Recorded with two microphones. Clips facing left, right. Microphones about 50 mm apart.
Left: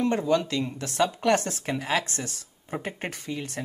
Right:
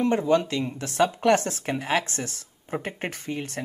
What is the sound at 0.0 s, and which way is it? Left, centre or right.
A woman's voice, centre.